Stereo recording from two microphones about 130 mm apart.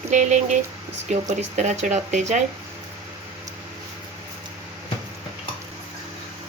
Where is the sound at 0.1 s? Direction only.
65° right (ahead or behind).